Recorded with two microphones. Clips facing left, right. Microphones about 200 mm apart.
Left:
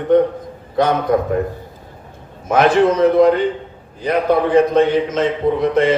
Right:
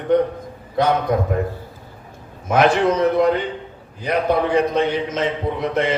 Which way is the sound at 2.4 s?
55° left (ahead or behind).